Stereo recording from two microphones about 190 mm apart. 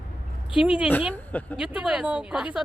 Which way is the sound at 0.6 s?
5° right (ahead or behind).